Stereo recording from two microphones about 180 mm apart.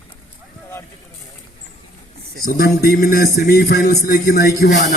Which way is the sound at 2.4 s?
55° left (ahead or behind).